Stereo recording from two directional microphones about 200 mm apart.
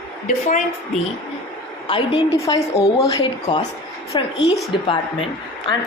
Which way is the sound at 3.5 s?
25° left (ahead or behind).